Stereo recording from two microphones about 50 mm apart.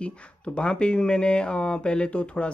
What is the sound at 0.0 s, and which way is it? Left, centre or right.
Speech, left.